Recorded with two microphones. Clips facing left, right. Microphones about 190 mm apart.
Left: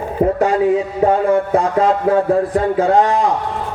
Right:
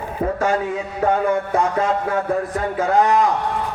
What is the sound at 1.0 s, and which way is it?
A man's voice, 30° left (ahead or behind).